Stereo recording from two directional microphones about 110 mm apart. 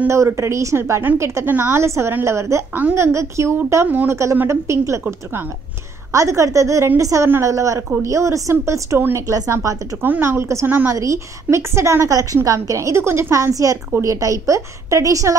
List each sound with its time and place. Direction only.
0.0 s a woman's voice: 25° right (ahead or behind)
6.1 s a woman's voice: 30° right (ahead or behind)